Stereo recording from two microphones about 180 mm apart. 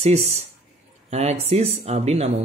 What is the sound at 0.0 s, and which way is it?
Speech, 35° right (ahead or behind).